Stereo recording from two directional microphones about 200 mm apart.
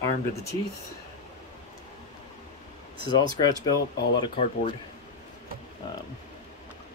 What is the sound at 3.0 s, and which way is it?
Speech, 20° left (ahead or behind).